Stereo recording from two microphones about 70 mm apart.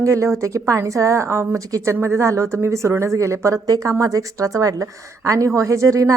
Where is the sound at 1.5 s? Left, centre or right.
Right.